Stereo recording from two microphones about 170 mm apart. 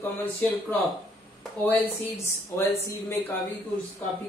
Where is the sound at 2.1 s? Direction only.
15° left (ahead or behind).